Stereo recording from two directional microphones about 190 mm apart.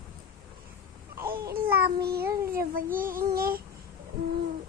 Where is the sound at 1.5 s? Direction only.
55° right (ahead or behind).